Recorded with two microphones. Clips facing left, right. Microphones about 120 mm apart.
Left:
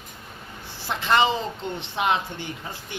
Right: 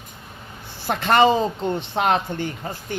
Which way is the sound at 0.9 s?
55° right (ahead or behind).